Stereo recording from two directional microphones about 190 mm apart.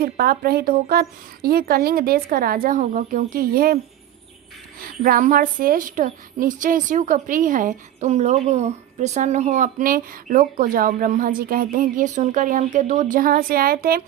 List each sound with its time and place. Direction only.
0.0 s speech: 50° right (ahead or behind)
4.8 s speech: 50° right (ahead or behind)